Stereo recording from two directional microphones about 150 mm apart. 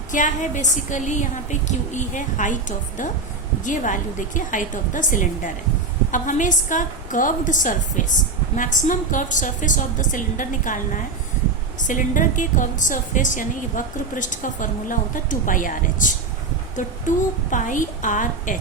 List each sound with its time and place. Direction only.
0.1 s a woman's voice: 55° left (ahead or behind)
11.8 s a woman's voice: 60° left (ahead or behind)